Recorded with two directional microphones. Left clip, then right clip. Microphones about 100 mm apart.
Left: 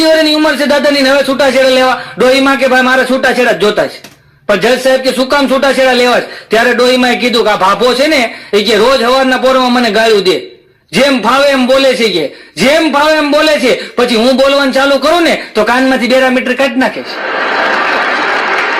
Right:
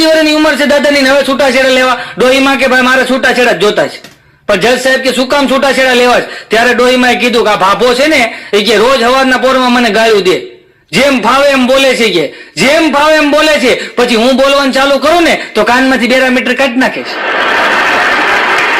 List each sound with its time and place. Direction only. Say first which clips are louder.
0.0 s a man's voice: right 1 dB; 30° right (ahead or behind)
2.7 s a man's voice: right 1 dB; 20° right (ahead or behind)
7.4 s a man's voice: even; 30° right (ahead or behind)